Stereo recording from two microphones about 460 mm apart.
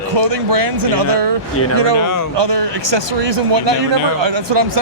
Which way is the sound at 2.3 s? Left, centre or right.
Right.